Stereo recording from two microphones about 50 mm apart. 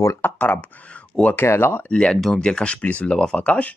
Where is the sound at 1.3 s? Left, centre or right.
Left.